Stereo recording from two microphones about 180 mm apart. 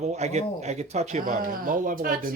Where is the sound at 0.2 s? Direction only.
40° right (ahead or behind).